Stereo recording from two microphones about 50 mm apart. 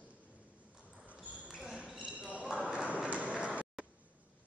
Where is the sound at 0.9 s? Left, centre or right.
Right.